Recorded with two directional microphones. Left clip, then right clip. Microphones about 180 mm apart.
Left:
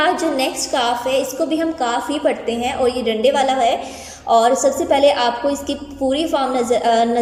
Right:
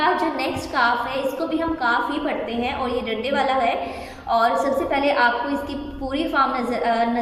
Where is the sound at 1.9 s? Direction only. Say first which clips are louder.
Left 3 dB; 35° left (ahead or behind).